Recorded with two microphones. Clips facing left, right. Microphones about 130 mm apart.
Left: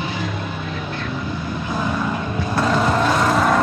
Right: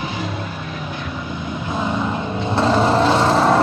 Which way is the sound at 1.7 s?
20° right (ahead or behind).